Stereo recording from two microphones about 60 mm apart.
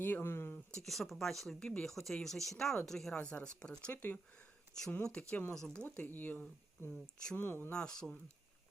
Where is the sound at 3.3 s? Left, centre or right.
Centre.